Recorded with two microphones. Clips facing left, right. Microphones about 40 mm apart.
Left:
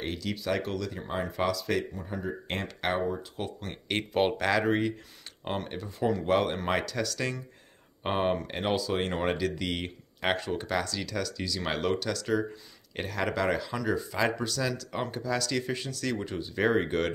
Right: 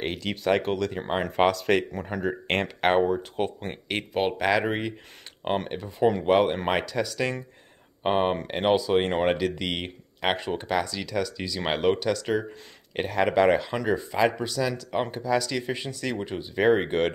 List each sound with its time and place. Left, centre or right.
0.0 s speech: right
3.9 s speech: centre
4.3 s speech: centre
5.4 s speech: right
5.7 s speech: right
9.1 s speech: right
9.4 s speech: centre